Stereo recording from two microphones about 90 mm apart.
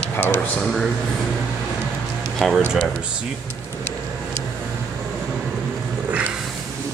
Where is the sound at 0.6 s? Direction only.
5° left (ahead or behind).